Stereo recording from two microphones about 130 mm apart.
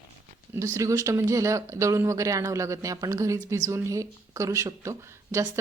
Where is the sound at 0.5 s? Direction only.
25° right (ahead or behind).